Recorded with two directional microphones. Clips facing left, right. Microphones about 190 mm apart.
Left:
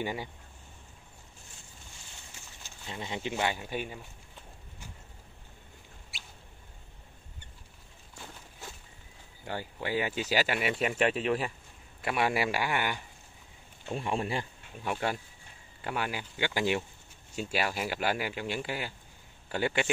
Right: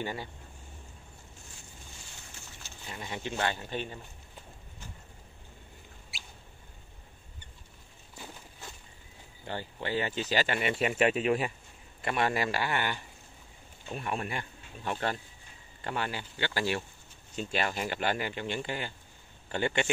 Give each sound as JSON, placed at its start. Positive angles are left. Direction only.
{"t": 0.0, "sound": "speech", "side_deg": 15}
{"t": 2.6, "sound": "speech", "side_deg": 20}
{"t": 9.4, "sound": "speech", "side_deg": 10}
{"t": 12.0, "sound": "speech", "side_deg": 5}
{"t": 13.9, "sound": "a man's voice", "side_deg": 25}
{"t": 14.8, "sound": "speech", "side_deg": 10}